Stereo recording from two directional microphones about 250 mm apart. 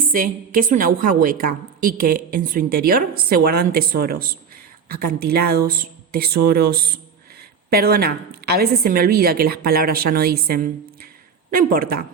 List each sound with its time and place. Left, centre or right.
0.1 s a woman's voice: right